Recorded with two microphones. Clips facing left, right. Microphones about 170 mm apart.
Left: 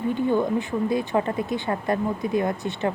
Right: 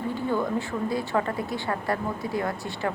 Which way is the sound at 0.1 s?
20° left (ahead or behind).